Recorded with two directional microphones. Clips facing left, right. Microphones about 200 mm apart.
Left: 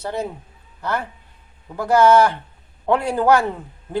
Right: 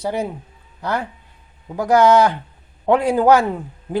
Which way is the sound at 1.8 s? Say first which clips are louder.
Right 1 dB; 15° right (ahead or behind).